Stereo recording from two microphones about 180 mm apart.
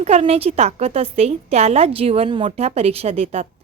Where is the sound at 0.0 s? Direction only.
35° right (ahead or behind).